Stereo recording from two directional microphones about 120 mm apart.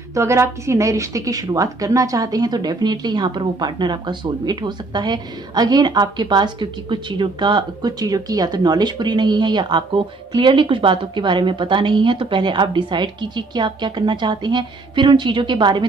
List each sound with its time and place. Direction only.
0.1 s a woman's voice: 25° right (ahead or behind); by 15.8 s 40° right (ahead or behind)